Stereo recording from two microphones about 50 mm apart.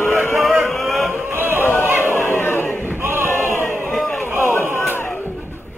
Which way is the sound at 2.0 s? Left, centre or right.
Left.